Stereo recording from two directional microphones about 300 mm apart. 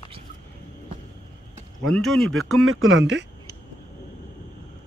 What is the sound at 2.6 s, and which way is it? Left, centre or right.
Speech, right.